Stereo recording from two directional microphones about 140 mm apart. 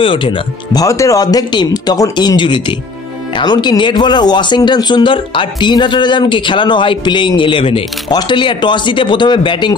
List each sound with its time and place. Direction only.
0.0 s speech: 35° left (ahead or behind)
0.8 s speech: 20° left (ahead or behind)